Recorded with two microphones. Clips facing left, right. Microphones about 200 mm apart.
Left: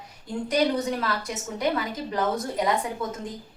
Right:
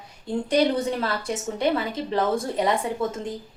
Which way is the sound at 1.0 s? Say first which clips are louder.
Right 3 dB; 30° right (ahead or behind).